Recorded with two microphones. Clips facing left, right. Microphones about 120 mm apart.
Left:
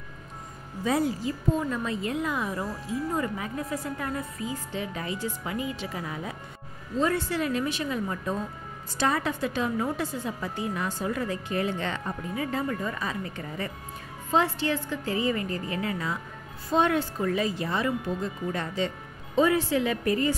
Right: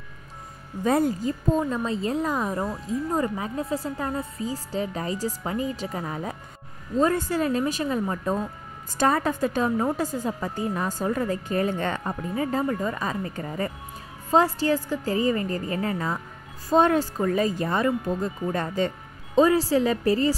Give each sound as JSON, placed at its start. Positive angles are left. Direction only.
{"t": 0.8, "sound": "speech", "side_deg": -45}
{"t": 1.5, "sound": "a woman's voice", "side_deg": -30}